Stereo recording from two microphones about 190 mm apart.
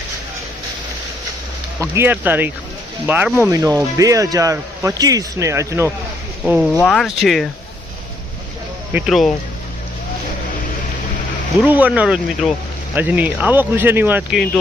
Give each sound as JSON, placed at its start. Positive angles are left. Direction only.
{"t": 1.8, "sound": "a man's voice", "side_deg": -10}
{"t": 6.8, "sound": "speech", "side_deg": 0}
{"t": 8.9, "sound": "speech", "side_deg": -5}
{"t": 11.6, "sound": "a man's voice", "side_deg": -10}